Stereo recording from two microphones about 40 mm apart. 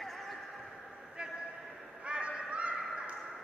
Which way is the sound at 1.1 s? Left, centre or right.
Right.